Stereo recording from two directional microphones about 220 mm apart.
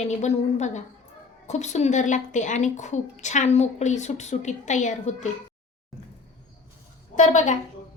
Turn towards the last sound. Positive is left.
turn(degrees=35)  # may be behind; listen again after turning